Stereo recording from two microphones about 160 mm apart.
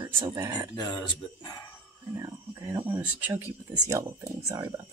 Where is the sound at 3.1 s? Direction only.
15° right (ahead or behind).